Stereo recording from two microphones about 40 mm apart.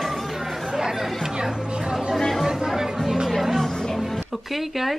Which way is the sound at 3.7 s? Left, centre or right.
Centre.